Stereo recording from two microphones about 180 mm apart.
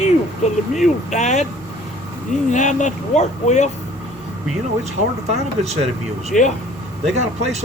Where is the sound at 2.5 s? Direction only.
45° left (ahead or behind).